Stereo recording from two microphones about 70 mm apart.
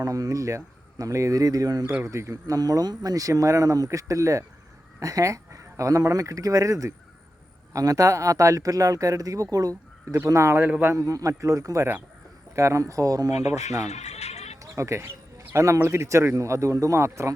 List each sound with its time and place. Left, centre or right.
0.0 s speech: right
2.0 s a man's voice: right
10.2 s a man's voice: right
10.6 s a man's voice: right
10.9 s a man's voice: right
14.6 s a man's voice: right